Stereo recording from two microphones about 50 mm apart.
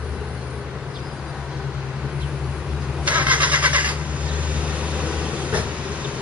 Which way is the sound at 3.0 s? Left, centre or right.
Right.